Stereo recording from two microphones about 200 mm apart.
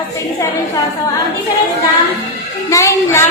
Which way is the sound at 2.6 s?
15° left (ahead or behind).